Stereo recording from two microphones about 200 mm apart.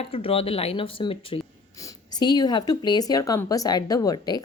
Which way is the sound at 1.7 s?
15° left (ahead or behind).